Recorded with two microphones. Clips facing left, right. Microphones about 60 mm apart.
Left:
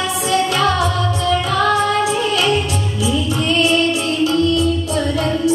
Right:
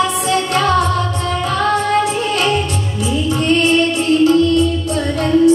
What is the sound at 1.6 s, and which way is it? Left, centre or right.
Female singing, right.